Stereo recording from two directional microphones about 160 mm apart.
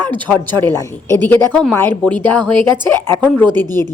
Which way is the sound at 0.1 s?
10° left (ahead or behind).